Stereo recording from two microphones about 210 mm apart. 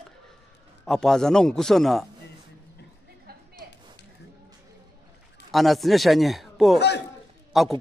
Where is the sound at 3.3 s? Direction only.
45° right (ahead or behind).